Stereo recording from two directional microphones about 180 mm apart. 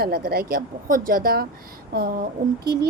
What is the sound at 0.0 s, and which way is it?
A woman's voice, 55° right (ahead or behind).